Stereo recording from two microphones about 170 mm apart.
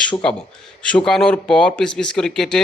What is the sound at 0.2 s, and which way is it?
Speech, 5° left (ahead or behind).